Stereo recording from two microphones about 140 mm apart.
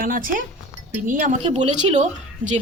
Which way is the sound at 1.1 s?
65° right (ahead or behind).